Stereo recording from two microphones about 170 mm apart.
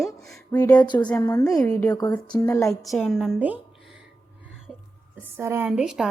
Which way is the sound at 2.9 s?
Centre (ahead or behind).